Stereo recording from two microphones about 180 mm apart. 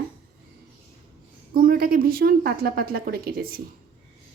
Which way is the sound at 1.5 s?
55° right (ahead or behind).